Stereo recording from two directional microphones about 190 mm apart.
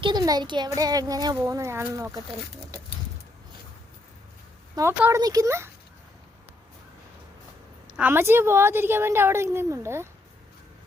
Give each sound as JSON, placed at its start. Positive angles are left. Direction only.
{"t": 0.0, "sound": "a child's voice", "side_deg": -20}
{"t": 4.7, "sound": "a woman's voice", "side_deg": -15}
{"t": 7.9, "sound": "a woman's voice", "side_deg": -10}